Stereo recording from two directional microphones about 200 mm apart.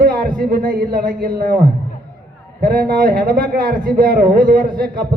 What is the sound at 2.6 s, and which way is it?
Speech, 50° right (ahead or behind).